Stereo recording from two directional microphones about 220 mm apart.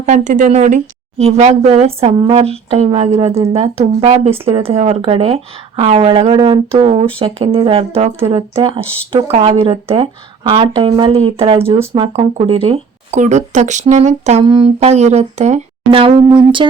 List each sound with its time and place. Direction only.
0.0 s speech: 35° right (ahead or behind)